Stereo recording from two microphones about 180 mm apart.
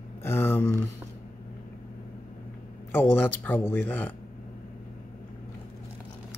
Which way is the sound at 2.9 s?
10° left (ahead or behind).